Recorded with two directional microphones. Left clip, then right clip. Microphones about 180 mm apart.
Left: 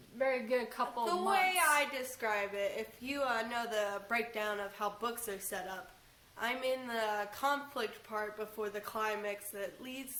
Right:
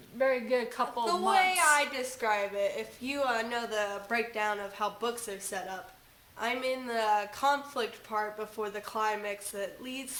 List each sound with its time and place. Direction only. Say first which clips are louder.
0.2 s speech: right 5 dB; 25° right (ahead or behind)
1.0 s a woman's voice: right 5 dB; 10° right (ahead or behind)